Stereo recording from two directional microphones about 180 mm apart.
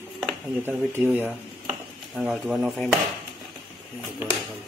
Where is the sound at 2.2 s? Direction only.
Centre (ahead or behind).